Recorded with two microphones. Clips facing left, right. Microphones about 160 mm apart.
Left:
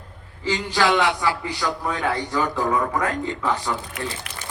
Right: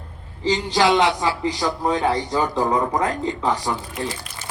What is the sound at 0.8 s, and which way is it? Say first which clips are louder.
A man's voice: right 2 dB; 15° right (ahead or behind).